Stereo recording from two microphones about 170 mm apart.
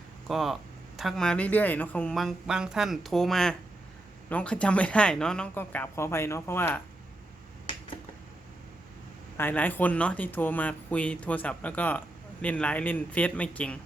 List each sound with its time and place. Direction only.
0.3 s speech: centre (ahead or behind)
9.4 s speech: 10° left (ahead or behind)